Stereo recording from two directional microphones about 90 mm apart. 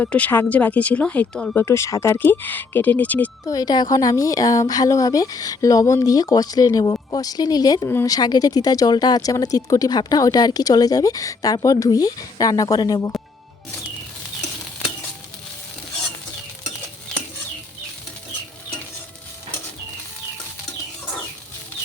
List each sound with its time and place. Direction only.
0.0 s speech: 15° left (ahead or behind)
1.5 s speech: 30° left (ahead or behind)
2.1 s speech: 20° left (ahead or behind)
3.4 s speech: 45° left (ahead or behind)